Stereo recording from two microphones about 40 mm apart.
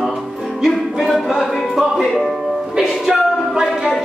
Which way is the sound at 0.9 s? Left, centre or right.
Centre.